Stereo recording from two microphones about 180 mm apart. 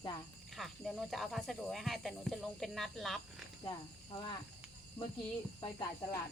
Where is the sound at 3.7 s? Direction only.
20° left (ahead or behind).